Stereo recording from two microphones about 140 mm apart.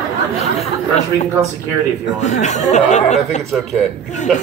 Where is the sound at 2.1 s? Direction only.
55° left (ahead or behind).